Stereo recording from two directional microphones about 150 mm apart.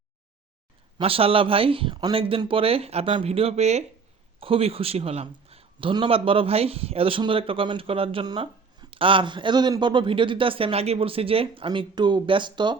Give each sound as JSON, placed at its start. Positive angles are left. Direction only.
{"t": 0.9, "sound": "a man's voice", "side_deg": -40}